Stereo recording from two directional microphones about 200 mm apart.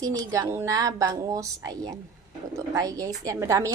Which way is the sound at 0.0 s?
15° right (ahead or behind).